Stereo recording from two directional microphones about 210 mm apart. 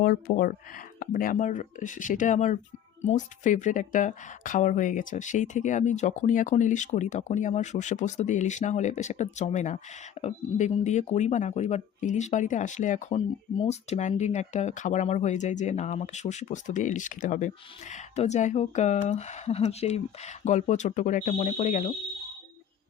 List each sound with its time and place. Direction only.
0.0 s speech: 45° left (ahead or behind)